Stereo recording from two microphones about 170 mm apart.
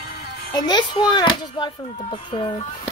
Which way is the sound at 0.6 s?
25° left (ahead or behind).